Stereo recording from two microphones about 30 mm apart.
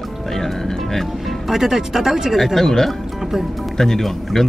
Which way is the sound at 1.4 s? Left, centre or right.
Centre.